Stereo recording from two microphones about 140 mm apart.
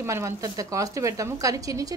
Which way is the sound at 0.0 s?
20° right (ahead or behind).